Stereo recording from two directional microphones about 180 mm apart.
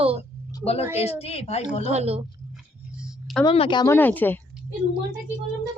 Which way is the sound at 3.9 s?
10° left (ahead or behind).